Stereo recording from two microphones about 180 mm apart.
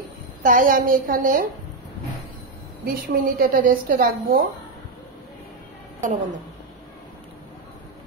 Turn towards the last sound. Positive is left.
turn(degrees=-45)  # may be behind; listen again after turning